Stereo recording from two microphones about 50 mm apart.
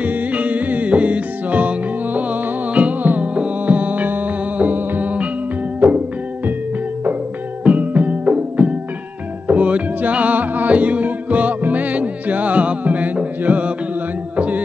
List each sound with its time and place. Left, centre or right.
0.0 s music: right
7.6 s music: right
14.3 s a sound: right